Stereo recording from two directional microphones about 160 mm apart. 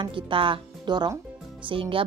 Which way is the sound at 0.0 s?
30° right (ahead or behind).